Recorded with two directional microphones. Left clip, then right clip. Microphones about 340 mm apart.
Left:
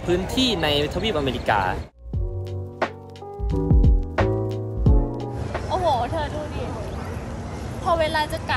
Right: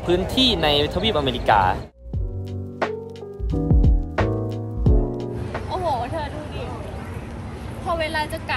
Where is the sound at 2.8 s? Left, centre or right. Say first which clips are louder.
Right 2 dB; centre.